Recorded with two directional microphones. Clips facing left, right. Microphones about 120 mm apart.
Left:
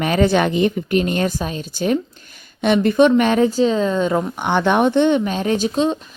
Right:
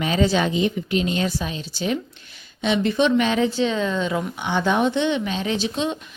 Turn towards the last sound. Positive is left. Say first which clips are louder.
# left 6 dB
turn(degrees=40)  # may be behind; listen again after turning